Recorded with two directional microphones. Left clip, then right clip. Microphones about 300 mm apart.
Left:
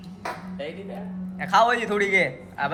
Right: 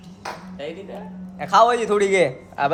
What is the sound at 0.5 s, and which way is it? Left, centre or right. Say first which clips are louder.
Speech: right 2 dB; right.